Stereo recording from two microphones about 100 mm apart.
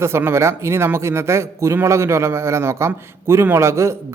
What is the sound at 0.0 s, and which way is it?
A man's voice, 25° right (ahead or behind).